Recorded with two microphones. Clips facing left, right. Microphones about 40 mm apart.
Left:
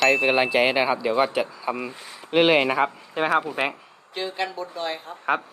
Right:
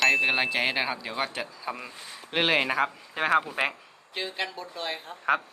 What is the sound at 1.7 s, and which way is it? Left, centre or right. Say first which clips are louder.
Speech: left 8 dB; centre.